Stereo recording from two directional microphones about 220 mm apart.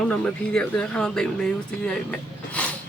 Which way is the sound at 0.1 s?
5° left (ahead or behind).